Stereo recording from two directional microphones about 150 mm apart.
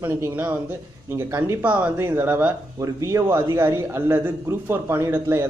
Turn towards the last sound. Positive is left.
turn(degrees=-15)  # may be behind; listen again after turning